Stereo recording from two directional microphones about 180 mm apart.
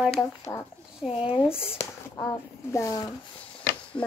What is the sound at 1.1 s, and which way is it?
Speech, 30° left (ahead or behind).